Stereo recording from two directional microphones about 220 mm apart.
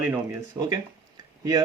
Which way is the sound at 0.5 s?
20° right (ahead or behind).